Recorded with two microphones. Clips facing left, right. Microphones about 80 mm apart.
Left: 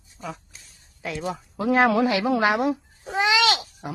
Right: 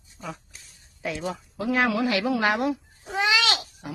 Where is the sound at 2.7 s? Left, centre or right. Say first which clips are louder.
Left 2 dB; left.